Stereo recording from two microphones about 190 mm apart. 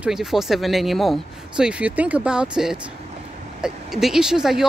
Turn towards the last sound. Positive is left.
turn(degrees=-5)  # may be behind; listen again after turning